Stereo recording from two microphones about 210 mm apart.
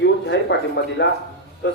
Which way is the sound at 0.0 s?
55° left (ahead or behind).